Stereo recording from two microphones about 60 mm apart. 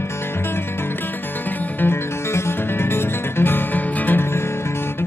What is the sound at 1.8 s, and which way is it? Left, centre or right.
Music, left.